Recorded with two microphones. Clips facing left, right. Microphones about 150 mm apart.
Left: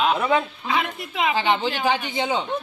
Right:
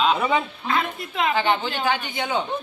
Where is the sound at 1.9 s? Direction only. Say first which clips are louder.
Left 2 dB; 25° left (ahead or behind).